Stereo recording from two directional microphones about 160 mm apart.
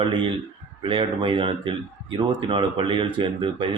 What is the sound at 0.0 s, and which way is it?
Speech, 30° right (ahead or behind).